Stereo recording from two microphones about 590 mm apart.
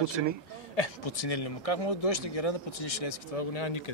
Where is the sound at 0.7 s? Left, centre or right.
Left.